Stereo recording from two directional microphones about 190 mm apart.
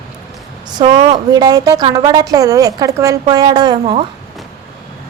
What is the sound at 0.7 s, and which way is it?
A woman's voice, 25° right (ahead or behind).